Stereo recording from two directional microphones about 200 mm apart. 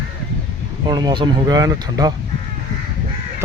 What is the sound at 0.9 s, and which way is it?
Speech, 20° right (ahead or behind).